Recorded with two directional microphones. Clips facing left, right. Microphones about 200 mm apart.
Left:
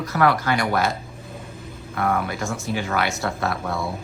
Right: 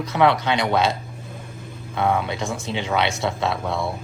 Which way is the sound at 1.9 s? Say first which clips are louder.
Right 2 dB; 20° right (ahead or behind).